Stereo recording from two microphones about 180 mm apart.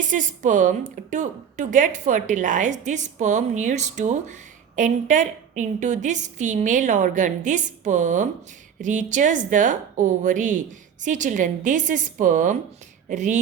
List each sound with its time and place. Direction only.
0.1 s a woman's voice: 45° right (ahead or behind)